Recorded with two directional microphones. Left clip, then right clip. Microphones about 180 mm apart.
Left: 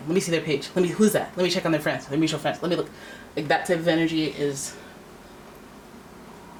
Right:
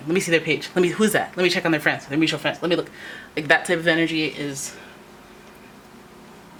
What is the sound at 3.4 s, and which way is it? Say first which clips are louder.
Speech: right 4 dB; 25° right (ahead or behind).